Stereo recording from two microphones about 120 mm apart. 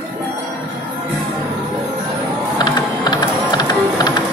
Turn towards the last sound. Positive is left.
turn(degrees=35)  # may be behind; listen again after turning